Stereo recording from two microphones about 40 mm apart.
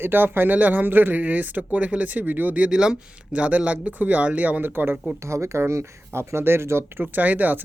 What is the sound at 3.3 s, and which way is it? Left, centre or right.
Speech, right.